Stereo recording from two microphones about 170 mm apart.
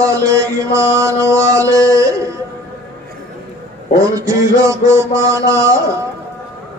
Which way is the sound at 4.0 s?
20° right (ahead or behind).